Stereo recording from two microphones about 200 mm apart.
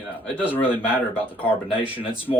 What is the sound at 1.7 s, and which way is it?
Speech, 25° left (ahead or behind).